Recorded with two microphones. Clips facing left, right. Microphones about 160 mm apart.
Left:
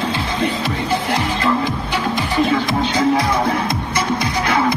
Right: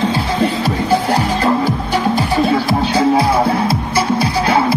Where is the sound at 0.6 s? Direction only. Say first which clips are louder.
Right 5 dB; 40° right (ahead or behind).